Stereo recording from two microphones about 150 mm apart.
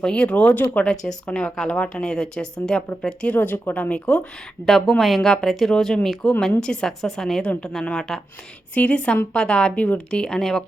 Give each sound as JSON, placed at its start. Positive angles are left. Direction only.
{"t": 0.0, "sound": "speech", "side_deg": 5}